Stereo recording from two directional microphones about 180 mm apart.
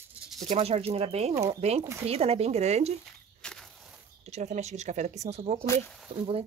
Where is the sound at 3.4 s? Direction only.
5° left (ahead or behind).